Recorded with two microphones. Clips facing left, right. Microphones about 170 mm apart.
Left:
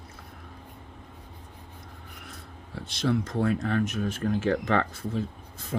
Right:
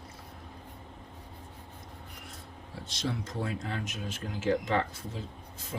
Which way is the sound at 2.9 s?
60° left (ahead or behind).